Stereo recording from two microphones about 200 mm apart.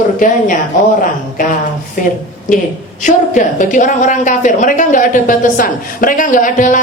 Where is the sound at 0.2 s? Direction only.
40° left (ahead or behind).